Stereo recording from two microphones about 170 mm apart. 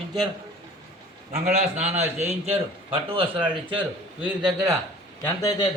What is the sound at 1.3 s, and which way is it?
A man's voice, 40° right (ahead or behind).